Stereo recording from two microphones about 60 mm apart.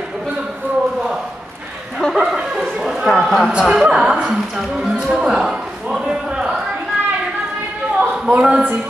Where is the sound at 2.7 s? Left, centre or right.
Centre.